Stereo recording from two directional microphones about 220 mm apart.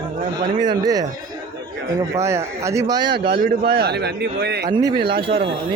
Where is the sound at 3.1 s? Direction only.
45° right (ahead or behind).